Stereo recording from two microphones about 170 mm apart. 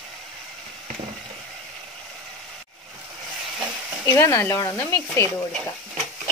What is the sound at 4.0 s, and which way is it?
Speech, 15° left (ahead or behind).